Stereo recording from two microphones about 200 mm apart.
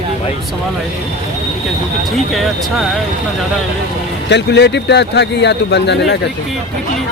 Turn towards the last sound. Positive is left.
turn(degrees=60)  # may be behind; listen again after turning